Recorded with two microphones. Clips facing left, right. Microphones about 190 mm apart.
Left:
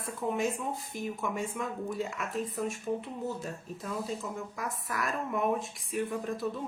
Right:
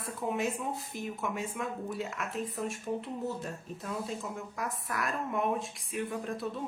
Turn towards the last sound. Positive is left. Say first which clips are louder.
# left 2 dB
turn(degrees=0)  # may be behind; listen again after turning